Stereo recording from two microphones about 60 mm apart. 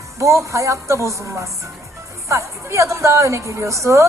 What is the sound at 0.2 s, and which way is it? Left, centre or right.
A woman's voice, right.